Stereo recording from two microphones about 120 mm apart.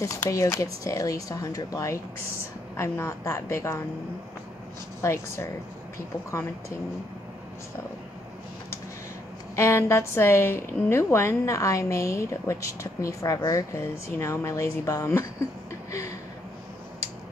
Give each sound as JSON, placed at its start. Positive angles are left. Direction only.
{"t": 0.0, "sound": "a woman's voice", "side_deg": 25}
{"t": 5.0, "sound": "a woman's voice", "side_deg": 20}
{"t": 9.6, "sound": "a woman's voice", "side_deg": 25}